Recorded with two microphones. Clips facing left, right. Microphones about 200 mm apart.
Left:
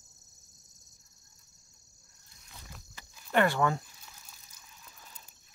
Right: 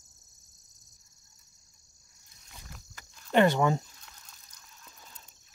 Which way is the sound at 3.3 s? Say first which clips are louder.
Right 3 dB; 20° right (ahead or behind).